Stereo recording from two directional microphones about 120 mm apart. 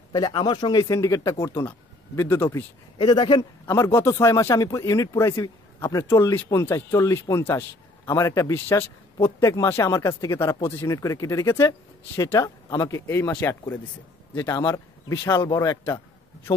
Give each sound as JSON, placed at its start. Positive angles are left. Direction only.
{"t": 0.1, "sound": "speech", "side_deg": 35}
{"t": 3.0, "sound": "a man's voice", "side_deg": 40}
{"t": 3.6, "sound": "speech", "side_deg": 20}
{"t": 13.0, "sound": "speech", "side_deg": 20}
{"t": 14.3, "sound": "speech", "side_deg": 30}